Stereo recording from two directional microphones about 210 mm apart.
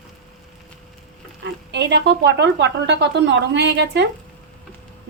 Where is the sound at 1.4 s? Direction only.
55° right (ahead or behind).